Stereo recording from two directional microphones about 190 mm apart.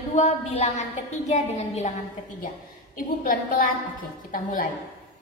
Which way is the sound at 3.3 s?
45° left (ahead or behind).